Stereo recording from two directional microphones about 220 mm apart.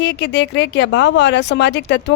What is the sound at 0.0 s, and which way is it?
Speech, 50° left (ahead or behind).